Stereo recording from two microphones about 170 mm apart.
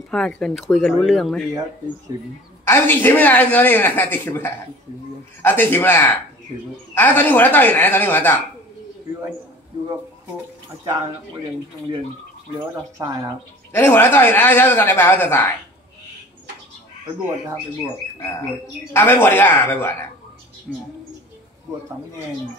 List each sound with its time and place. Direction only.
0.1 s speech: 5° left (ahead or behind)
2.6 s speech: 15° left (ahead or behind)
12.5 s speech: 20° right (ahead or behind)
13.7 s speech: 15° left (ahead or behind)
18.9 s speech: 15° left (ahead or behind)
20.7 s speech: centre (ahead or behind)